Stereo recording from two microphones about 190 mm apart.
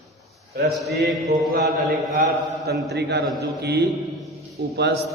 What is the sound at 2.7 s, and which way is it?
Speech, 60° right (ahead or behind).